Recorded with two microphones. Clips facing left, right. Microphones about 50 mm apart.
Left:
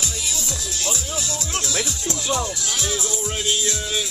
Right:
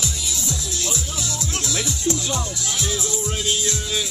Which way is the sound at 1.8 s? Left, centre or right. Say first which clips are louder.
Right 3 dB; left.